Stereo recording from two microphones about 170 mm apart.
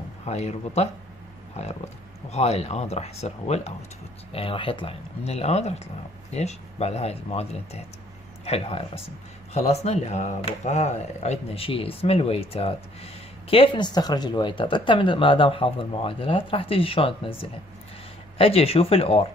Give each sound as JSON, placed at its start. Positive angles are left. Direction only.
{"t": 0.2, "sound": "speech", "side_deg": 40}
{"t": 2.3, "sound": "speech", "side_deg": 40}